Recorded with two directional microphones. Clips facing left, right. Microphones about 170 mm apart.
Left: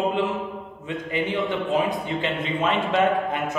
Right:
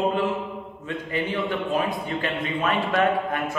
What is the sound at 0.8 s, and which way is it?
Mantra, 20° left (ahead or behind).